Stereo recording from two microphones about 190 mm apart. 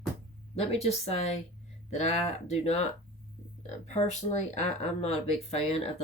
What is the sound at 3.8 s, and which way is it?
Speech, 35° left (ahead or behind).